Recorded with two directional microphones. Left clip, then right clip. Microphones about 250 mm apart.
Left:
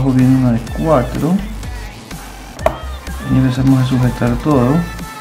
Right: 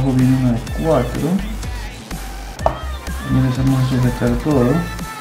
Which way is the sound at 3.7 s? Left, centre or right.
Centre.